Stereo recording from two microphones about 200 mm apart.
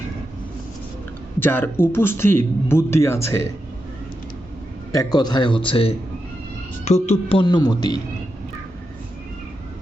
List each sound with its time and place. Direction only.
1.4 s a man's voice: 10° left (ahead or behind)
4.9 s speech: 20° left (ahead or behind)